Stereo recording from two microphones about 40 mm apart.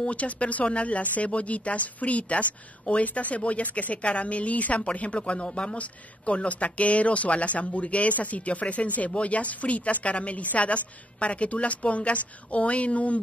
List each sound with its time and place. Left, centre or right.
0.0 s speech: left